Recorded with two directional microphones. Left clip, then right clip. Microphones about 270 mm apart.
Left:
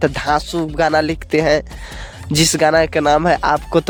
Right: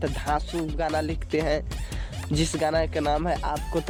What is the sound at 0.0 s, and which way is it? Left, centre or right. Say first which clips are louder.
Speech: left 11 dB; left.